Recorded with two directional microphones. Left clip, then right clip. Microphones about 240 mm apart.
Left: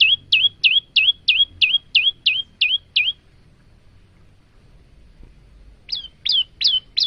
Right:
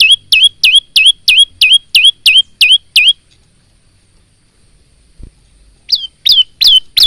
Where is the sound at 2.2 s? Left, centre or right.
Right.